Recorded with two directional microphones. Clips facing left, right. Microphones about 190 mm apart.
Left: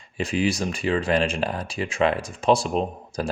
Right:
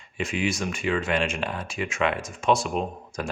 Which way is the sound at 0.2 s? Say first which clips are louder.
Left 3 dB; 35° left (ahead or behind).